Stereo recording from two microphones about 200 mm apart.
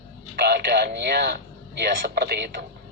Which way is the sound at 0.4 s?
55° right (ahead or behind).